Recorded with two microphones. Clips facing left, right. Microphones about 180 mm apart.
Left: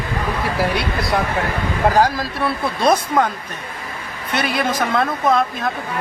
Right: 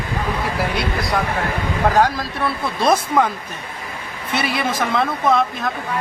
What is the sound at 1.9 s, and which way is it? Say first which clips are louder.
Speech: left 1 dB; centre (ahead or behind).